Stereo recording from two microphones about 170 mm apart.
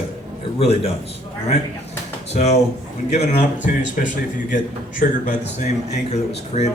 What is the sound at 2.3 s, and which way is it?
A man's voice, 40° left (ahead or behind).